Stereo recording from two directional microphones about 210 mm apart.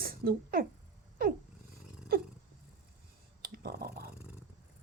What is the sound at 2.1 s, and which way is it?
Speech, 45° right (ahead or behind).